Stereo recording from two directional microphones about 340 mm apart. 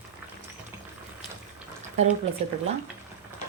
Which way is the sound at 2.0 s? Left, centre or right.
Centre.